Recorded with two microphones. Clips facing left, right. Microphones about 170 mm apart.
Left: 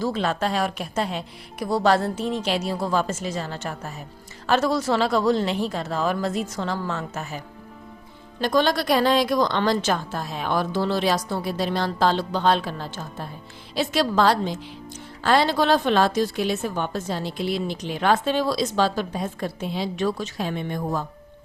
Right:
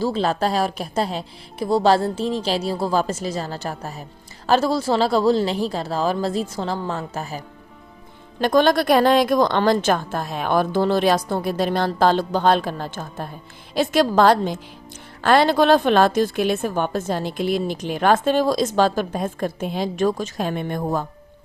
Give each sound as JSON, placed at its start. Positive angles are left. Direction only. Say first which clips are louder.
{"t": 0.0, "sound": "speech", "louder": "right 3 dB", "side_deg": -30}
{"t": 8.4, "sound": "a woman's voice", "louder": "right 4 dB", "side_deg": -55}